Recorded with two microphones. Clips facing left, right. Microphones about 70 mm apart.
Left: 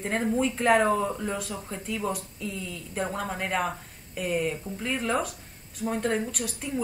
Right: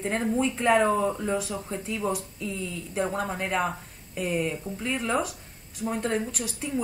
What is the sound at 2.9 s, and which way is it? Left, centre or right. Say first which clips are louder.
A woman's voice: right 2 dB; centre.